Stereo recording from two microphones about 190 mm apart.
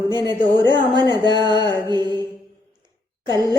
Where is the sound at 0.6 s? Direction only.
25° right (ahead or behind).